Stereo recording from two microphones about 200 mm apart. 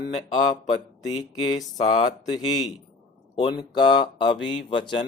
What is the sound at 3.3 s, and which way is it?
Speech, 25° left (ahead or behind).